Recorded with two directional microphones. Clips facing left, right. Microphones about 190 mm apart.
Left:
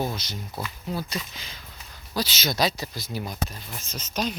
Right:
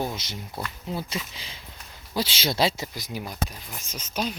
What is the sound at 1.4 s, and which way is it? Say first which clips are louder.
Speech: right 1 dB; 30° right (ahead or behind).